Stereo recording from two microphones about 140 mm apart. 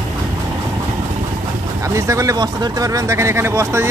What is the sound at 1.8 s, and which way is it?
Speech, 20° right (ahead or behind).